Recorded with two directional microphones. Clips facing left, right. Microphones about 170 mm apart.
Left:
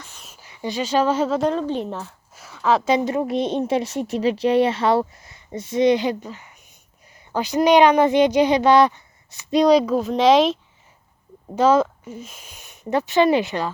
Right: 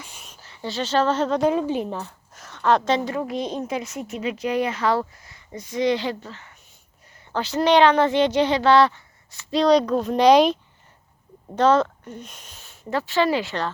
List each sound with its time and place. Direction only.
0.0 s a sound: 15° right (ahead or behind)
0.3 s speech: 10° left (ahead or behind)
1.5 s a woman's voice: 10° right (ahead or behind); by 3.0 s 5° left (ahead or behind)
3.0 s a woman's voice: 20° left (ahead or behind)